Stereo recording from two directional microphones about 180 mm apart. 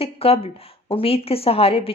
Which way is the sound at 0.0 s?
35° left (ahead or behind).